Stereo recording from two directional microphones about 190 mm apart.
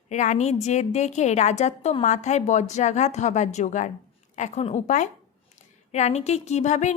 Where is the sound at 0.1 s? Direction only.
40° left (ahead or behind).